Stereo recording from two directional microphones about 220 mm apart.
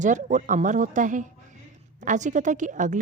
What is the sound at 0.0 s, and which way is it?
A woman's voice, 35° right (ahead or behind).